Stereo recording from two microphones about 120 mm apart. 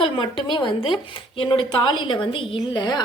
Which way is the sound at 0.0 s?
45° left (ahead or behind).